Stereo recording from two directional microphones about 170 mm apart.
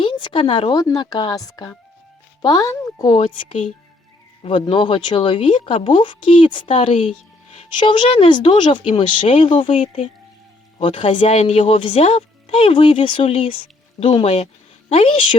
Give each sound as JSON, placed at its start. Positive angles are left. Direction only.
{"t": 0.0, "sound": "speech", "side_deg": 30}
{"t": 3.1, "sound": "speech", "side_deg": 35}
{"t": 9.8, "sound": "speech", "side_deg": 45}
{"t": 10.8, "sound": "speech", "side_deg": 30}
{"t": 11.3, "sound": "speech", "side_deg": 40}